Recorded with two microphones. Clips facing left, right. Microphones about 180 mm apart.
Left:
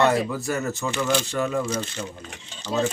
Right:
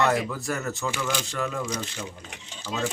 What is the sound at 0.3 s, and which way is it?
Speech, centre (ahead or behind).